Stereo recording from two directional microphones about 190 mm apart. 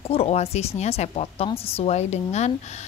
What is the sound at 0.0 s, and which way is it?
A woman's voice, 30° left (ahead or behind).